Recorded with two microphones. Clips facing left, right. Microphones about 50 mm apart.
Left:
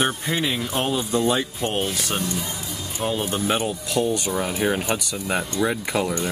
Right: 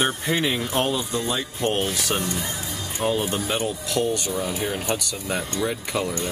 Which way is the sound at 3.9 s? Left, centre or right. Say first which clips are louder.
Left 2 dB; centre.